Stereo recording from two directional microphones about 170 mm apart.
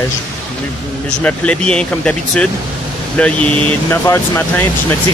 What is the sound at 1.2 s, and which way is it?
Speech, 5° left (ahead or behind).